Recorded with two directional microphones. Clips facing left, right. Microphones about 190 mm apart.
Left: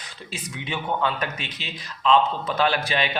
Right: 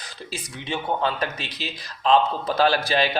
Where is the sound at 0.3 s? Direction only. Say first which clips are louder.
Right 1 dB; 35° right (ahead or behind).